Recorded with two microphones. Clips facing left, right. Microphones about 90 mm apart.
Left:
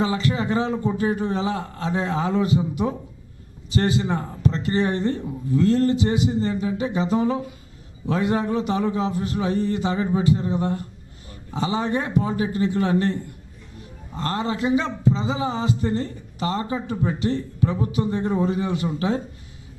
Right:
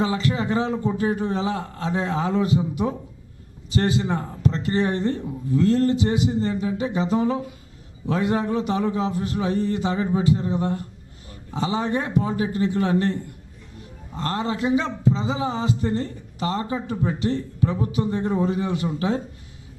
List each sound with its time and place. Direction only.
0.0 s a man's voice: 10° left (ahead or behind)